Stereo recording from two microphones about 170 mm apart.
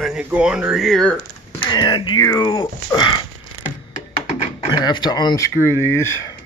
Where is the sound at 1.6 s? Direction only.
25° left (ahead or behind).